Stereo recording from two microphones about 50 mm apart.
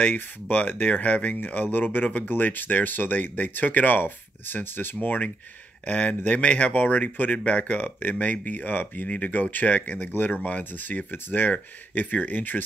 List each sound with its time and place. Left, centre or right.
0.0 s speech: left